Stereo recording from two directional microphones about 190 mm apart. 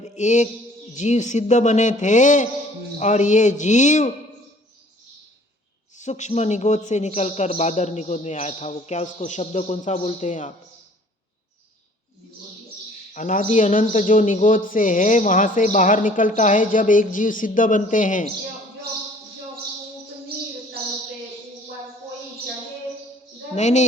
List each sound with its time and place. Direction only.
0.0 s music: 40° left (ahead or behind)
0.9 s a man's voice: 40° left (ahead or behind)
6.0 s a man's voice: 40° left (ahead or behind)
13.1 s speech: 45° left (ahead or behind)
23.6 s a man's voice: 35° left (ahead or behind)